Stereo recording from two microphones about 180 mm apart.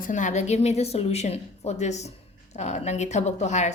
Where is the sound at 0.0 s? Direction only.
45° left (ahead or behind).